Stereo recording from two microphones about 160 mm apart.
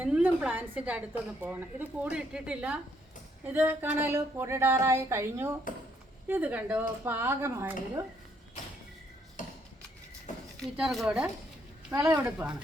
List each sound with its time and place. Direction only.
0.0 s a woman's voice: 10° right (ahead or behind)
10.6 s speech: centre (ahead or behind)
11.9 s a woman's voice: 20° right (ahead or behind)